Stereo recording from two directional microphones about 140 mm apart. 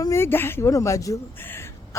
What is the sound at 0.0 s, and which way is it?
A woman's voice, 20° left (ahead or behind).